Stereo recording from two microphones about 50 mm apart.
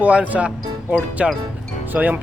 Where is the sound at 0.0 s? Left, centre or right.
Right.